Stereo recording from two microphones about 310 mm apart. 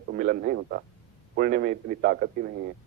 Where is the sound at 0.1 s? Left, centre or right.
Right.